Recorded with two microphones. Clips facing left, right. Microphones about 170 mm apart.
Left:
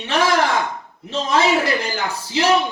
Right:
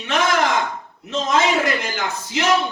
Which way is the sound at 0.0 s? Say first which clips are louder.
Left 2 dB; 30° left (ahead or behind).